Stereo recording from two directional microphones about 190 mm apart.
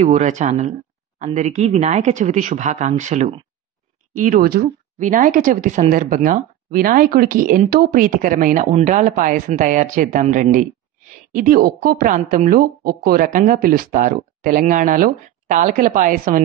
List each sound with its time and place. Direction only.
0.0 s speech: 40° right (ahead or behind)